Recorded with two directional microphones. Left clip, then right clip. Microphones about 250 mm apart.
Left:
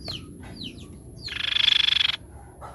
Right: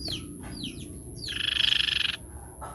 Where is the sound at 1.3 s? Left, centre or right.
Centre.